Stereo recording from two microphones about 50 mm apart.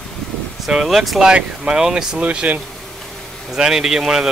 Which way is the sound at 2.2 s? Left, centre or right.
Right.